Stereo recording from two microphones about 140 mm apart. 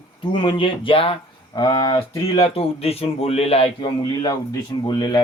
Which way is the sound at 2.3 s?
45° left (ahead or behind).